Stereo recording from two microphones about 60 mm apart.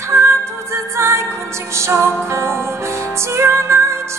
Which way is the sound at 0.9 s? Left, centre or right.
Right.